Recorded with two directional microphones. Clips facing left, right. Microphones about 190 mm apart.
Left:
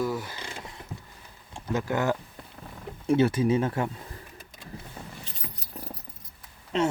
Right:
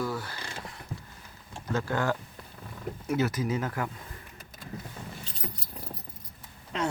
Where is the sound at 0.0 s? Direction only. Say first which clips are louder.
Left 3 dB; 20° left (ahead or behind).